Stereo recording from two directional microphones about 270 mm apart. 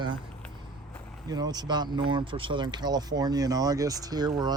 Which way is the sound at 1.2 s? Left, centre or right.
Centre.